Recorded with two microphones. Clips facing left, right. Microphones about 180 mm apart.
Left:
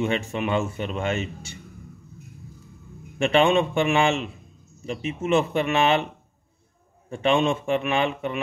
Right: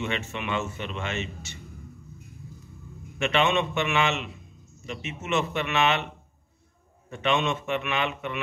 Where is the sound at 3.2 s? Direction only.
35° left (ahead or behind).